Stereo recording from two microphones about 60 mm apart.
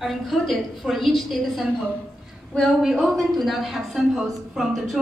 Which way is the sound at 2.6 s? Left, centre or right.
Centre.